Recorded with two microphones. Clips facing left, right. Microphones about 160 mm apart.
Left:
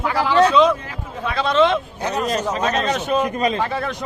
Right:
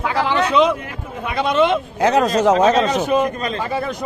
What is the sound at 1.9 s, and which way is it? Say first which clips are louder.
A man's voice: right 7 dB; 90° right.